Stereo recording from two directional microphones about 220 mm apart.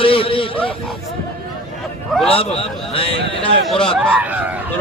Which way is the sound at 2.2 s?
25° left (ahead or behind).